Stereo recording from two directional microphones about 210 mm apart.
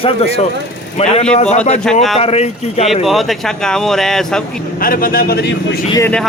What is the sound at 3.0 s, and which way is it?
Speech, centre (ahead or behind).